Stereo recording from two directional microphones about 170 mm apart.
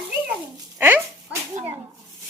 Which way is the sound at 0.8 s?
10° right (ahead or behind).